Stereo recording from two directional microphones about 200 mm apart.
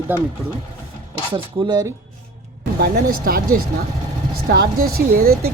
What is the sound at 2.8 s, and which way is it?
A woman's voice, 45° right (ahead or behind).